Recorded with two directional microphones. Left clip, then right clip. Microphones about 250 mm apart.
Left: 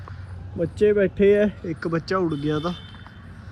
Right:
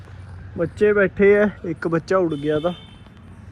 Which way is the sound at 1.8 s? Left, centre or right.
Centre.